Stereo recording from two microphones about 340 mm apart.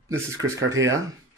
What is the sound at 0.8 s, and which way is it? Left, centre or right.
Speech, right.